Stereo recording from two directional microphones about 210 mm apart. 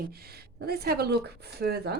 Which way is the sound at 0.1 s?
45° right (ahead or behind).